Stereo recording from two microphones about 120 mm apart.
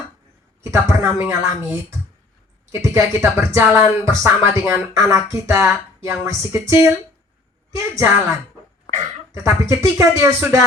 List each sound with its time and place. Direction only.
0.6 s speech: 25° right (ahead or behind)
2.8 s speech: 20° right (ahead or behind)
7.9 s speech: 25° right (ahead or behind)